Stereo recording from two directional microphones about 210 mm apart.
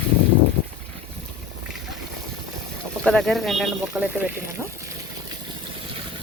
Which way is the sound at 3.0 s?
Centre (ahead or behind).